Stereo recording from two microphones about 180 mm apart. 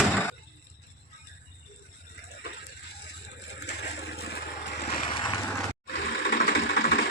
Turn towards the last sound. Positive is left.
turn(degrees=60)  # may be behind; listen again after turning